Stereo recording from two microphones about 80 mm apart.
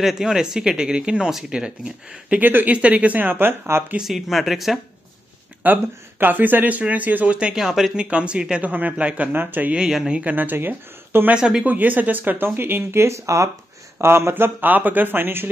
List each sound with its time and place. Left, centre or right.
0.0 s speech: centre; by 3.8 s right
4.0 s speech: centre
5.6 s speech: right
9.8 s speech: centre; by 11.3 s right
11.3 s speech: centre
11.6 s speech: right